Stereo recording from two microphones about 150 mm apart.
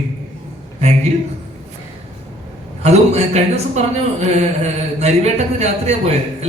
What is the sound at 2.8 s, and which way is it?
Speech, 45° right (ahead or behind).